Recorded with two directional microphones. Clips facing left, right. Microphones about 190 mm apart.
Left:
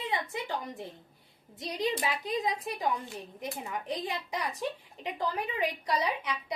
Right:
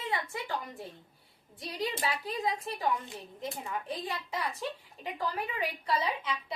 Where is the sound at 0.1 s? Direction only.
20° left (ahead or behind).